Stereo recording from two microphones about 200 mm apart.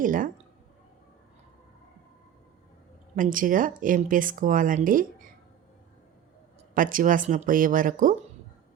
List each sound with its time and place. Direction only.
0.0 s speech: 40° right (ahead or behind)
3.2 s speech: 40° right (ahead or behind)
6.7 s speech: 45° right (ahead or behind)